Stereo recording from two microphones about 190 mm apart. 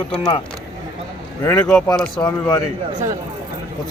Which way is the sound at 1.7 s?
5° left (ahead or behind).